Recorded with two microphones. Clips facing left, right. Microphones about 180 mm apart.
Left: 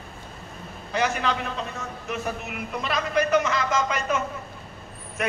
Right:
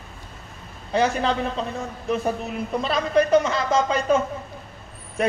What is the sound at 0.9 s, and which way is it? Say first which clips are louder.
A man's voice: right 4 dB; 30° right (ahead or behind).